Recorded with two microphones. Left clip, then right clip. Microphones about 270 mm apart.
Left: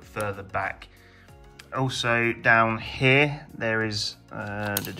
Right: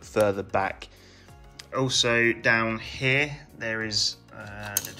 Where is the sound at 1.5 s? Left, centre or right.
Centre.